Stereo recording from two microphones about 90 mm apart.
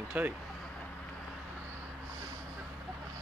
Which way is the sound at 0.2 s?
20° right (ahead or behind).